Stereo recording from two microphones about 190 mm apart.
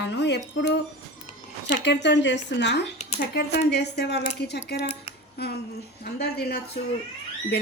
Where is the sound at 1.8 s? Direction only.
65° left (ahead or behind).